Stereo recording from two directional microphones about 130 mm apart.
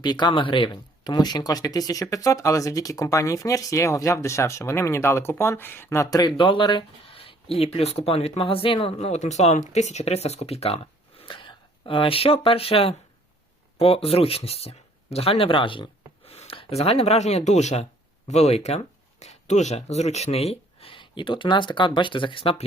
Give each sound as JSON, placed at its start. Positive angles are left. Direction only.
{"t": 0.0, "sound": "speech", "side_deg": 35}
{"t": 11.2, "sound": "speech", "side_deg": 40}